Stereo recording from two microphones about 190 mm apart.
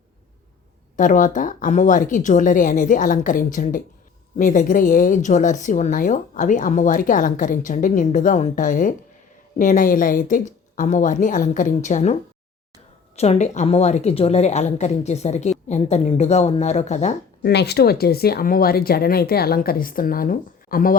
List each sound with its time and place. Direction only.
0.9 s a woman's voice: 45° left (ahead or behind)
13.1 s a woman's voice: 35° left (ahead or behind)
17.4 s a woman's voice: 60° left (ahead or behind)